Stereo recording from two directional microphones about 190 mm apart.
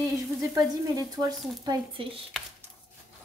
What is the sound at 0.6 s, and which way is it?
Sizzle, 20° right (ahead or behind).